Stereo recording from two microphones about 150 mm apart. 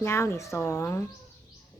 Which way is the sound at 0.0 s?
15° left (ahead or behind).